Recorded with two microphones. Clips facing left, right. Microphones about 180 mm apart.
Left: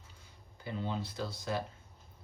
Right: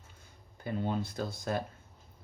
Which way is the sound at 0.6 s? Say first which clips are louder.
Right 4 dB; 50° right (ahead or behind).